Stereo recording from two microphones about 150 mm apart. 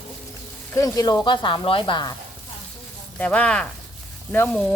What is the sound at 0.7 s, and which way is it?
Speech, 25° left (ahead or behind).